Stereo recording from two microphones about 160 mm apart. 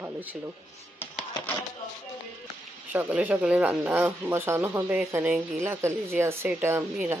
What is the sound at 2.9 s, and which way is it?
Speech, 10° right (ahead or behind).